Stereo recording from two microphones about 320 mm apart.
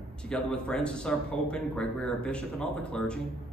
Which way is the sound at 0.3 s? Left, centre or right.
Centre.